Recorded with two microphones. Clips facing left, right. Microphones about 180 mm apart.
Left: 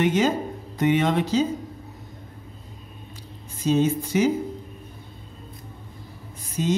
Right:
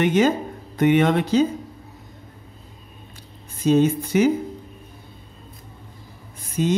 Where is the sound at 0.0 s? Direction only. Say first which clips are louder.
Right 3 dB; 60° right (ahead or behind).